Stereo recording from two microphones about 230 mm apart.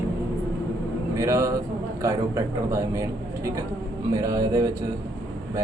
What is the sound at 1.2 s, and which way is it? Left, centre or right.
A man's voice, centre.